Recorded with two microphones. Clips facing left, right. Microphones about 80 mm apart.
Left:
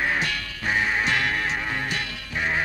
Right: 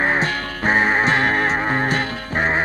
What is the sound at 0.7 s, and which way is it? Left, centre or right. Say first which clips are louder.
Music: right 7 dB; right.